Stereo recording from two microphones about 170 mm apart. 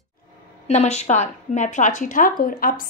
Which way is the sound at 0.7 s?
40° left (ahead or behind).